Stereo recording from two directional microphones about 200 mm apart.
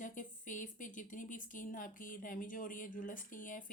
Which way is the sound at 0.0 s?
40° left (ahead or behind).